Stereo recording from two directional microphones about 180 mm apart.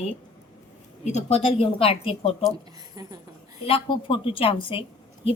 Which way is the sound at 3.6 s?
30° left (ahead or behind).